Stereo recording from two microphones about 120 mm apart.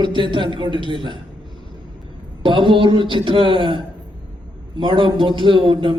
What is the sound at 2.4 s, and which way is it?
A man's voice, 45° right (ahead or behind).